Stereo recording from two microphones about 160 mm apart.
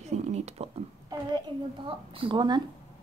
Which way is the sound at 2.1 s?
30° right (ahead or behind).